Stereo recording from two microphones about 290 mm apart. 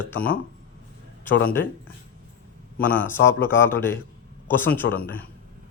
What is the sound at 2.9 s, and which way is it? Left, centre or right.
Speech, centre.